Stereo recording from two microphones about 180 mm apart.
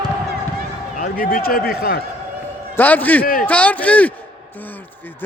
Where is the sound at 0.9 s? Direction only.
50° left (ahead or behind).